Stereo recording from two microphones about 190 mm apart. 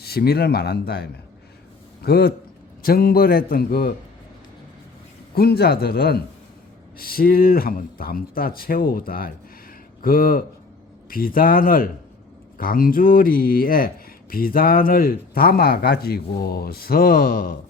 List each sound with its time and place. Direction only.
0.0 s speech: 55° left (ahead or behind)
5.3 s speech: 55° left (ahead or behind)